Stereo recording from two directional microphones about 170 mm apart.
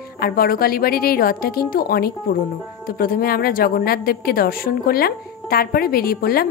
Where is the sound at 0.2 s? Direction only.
60° left (ahead or behind).